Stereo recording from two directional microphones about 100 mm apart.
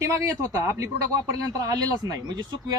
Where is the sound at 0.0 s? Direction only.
30° right (ahead or behind).